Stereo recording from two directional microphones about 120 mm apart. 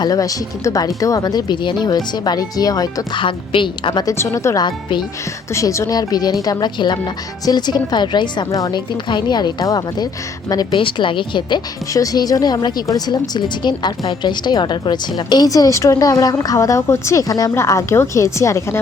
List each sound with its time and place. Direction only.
0.0 s a woman's voice: 30° left (ahead or behind)
3.2 s a woman's voice: 45° left (ahead or behind)
4.0 s speech: 25° left (ahead or behind)
4.6 s a woman's voice: 40° left (ahead or behind)
5.5 s a woman's voice: 25° left (ahead or behind)
8.4 s speech: 30° left (ahead or behind)
9.0 s a woman's voice: 40° left (ahead or behind)